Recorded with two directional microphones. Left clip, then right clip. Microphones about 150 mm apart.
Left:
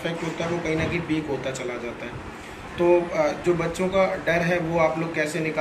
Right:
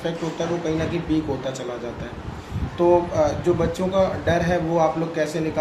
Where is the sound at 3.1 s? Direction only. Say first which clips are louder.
Right 2 dB; 50° right (ahead or behind).